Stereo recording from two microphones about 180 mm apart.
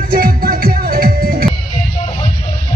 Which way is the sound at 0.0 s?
50° right (ahead or behind).